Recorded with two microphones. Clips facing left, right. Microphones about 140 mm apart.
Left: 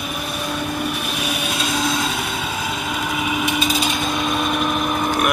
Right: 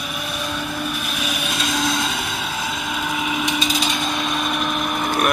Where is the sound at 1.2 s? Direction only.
10° left (ahead or behind).